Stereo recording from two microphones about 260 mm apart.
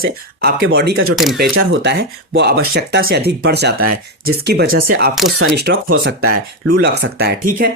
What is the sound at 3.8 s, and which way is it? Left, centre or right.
Speech, right.